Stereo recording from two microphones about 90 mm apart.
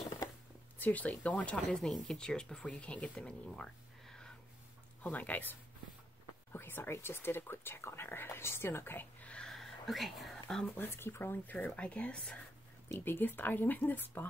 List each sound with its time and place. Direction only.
0.7 s speech: 20° left (ahead or behind)
5.0 s speech: 15° left (ahead or behind)
9.3 s whispering: 5° left (ahead or behind)
10.8 s speech: 25° left (ahead or behind)
12.8 s speech: 25° left (ahead or behind)